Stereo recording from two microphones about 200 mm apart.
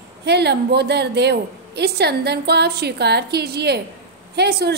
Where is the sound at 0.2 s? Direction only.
55° right (ahead or behind).